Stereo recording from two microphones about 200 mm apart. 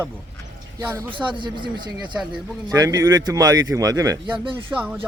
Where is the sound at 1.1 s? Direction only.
25° right (ahead or behind).